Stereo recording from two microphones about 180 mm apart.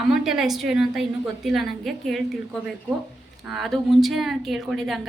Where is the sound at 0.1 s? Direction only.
Centre (ahead or behind).